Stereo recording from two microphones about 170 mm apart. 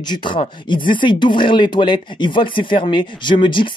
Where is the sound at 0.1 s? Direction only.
25° left (ahead or behind).